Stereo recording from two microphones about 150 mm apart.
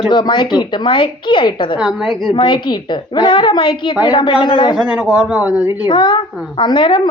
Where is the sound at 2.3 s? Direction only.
30° left (ahead or behind).